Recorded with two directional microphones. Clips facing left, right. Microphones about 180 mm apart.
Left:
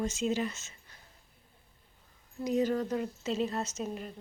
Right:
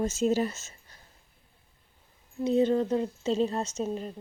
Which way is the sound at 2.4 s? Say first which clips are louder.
Right 5 dB; 30° right (ahead or behind).